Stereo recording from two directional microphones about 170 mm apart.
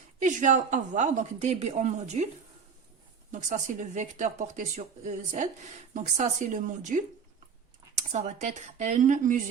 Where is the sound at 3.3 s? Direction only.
45° right (ahead or behind).